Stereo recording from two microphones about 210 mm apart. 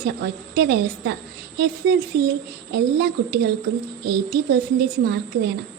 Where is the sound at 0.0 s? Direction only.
50° right (ahead or behind).